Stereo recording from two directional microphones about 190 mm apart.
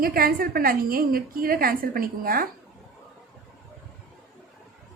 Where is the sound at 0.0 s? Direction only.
50° right (ahead or behind).